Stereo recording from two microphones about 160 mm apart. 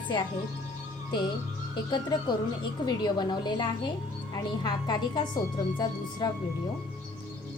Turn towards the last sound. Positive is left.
turn(degrees=25)  # may be behind; listen again after turning